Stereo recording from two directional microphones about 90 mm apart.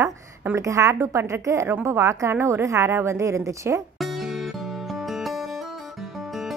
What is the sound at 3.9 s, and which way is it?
Music, centre (ahead or behind).